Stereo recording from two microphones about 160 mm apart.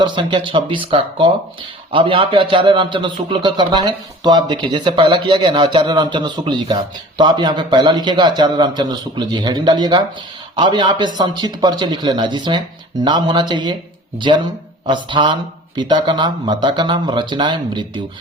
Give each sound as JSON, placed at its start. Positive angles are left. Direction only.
{"t": 0.0, "sound": "speech", "side_deg": -30}